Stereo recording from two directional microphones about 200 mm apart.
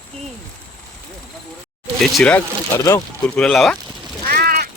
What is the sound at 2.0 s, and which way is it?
Speech, 5° left (ahead or behind).